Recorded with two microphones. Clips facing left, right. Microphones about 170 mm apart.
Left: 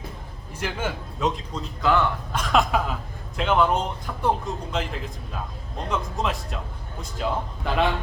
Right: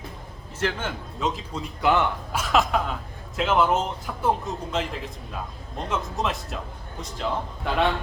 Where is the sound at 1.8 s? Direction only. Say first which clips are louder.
Even; 20° right (ahead or behind).